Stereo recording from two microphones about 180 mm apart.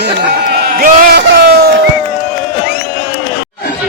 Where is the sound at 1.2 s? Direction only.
60° right (ahead or behind).